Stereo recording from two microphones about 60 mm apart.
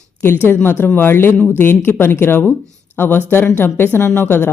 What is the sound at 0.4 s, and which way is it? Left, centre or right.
Speech, left.